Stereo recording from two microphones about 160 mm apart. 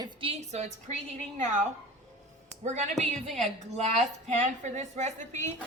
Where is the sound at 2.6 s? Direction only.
45° right (ahead or behind).